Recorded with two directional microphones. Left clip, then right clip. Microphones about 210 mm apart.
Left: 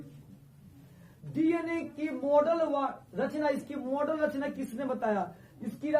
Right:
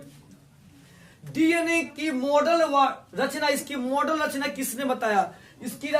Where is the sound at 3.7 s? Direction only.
25° right (ahead or behind).